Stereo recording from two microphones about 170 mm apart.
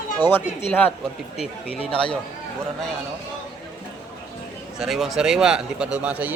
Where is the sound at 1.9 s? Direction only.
30° left (ahead or behind).